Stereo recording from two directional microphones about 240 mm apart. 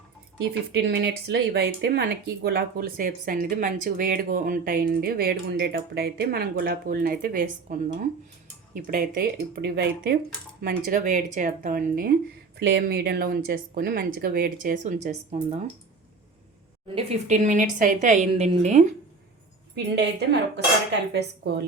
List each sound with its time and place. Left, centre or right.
0.7 s speech: right
16.9 s a woman's voice: right
19.7 s a woman's voice: right